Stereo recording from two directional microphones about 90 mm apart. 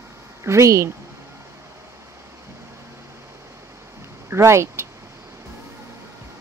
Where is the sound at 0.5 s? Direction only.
35° right (ahead or behind).